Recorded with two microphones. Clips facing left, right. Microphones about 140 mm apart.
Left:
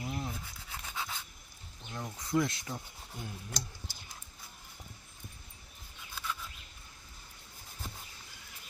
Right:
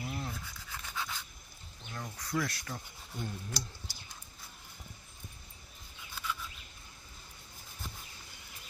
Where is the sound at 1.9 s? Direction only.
15° left (ahead or behind).